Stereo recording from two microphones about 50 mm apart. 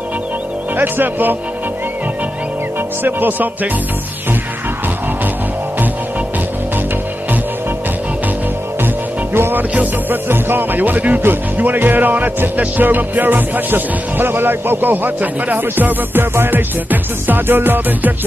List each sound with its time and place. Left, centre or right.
0.7 s speech: right
3.0 s speech: right
8.8 s music: right
9.6 s speech: right